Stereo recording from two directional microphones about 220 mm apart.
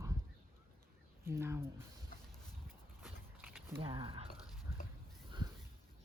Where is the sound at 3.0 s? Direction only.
10° right (ahead or behind).